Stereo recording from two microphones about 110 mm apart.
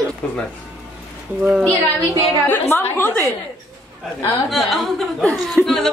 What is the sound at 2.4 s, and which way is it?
Speech, 20° left (ahead or behind).